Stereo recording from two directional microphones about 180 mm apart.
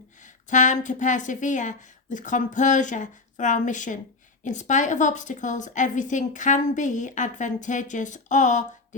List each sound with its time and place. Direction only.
0.2 s a woman's voice: 45° left (ahead or behind)